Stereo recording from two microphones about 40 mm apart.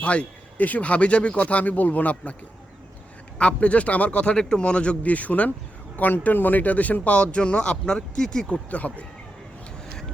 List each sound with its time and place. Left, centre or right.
0.0 s a sound: left
0.7 s speech: left
3.3 s speech: left; by 8.4 s centre
8.4 s speech: left